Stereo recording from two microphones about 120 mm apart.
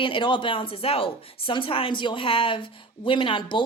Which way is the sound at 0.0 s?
45° left (ahead or behind).